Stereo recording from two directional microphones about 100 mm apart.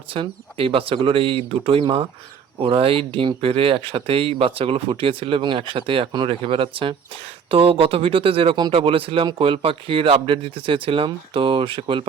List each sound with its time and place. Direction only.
0.1 s speech: 65° right (ahead or behind)